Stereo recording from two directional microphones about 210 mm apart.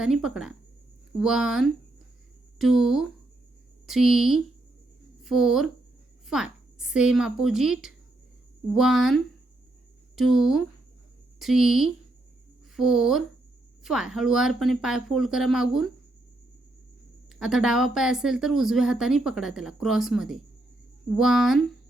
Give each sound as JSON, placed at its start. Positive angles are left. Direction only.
{"t": 0.0, "sound": "a woman's voice", "side_deg": -5}
{"t": 17.4, "sound": "speech", "side_deg": -5}